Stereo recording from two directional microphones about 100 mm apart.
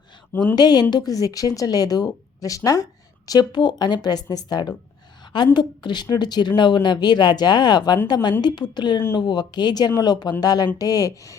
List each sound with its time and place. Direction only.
0.5 s a woman's voice: 45° left (ahead or behind)
5.2 s a sound: 50° left (ahead or behind)
5.5 s a woman's voice: 50° left (ahead or behind)